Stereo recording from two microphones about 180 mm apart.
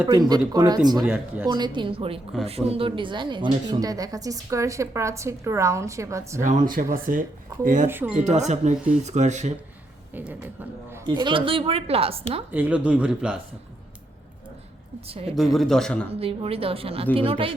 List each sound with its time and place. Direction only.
0.0 s speech: 20° right (ahead or behind)
1.5 s speech: 25° right (ahead or behind)
6.4 s speech: 45° right (ahead or behind)
7.9 s speech: 10° right (ahead or behind)
8.2 s a woman's voice: 40° right (ahead or behind)
10.2 s speech: 5° right (ahead or behind)
11.0 s speech: 25° right (ahead or behind)
12.5 s speech: 10° right (ahead or behind)
15.5 s a man's voice: centre (ahead or behind)
16.1 s a woman's voice: 30° right (ahead or behind)